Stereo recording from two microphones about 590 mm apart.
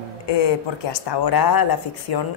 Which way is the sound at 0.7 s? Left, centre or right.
Left.